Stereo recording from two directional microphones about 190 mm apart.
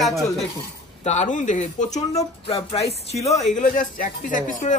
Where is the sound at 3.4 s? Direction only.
40° left (ahead or behind).